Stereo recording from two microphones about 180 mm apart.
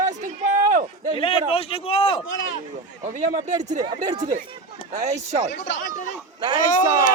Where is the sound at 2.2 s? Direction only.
90° left.